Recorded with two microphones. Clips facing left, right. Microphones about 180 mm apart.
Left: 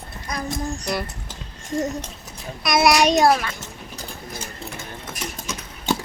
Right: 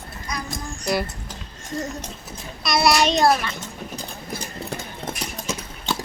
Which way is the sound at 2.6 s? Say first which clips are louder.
Left 2 dB; 15° left (ahead or behind).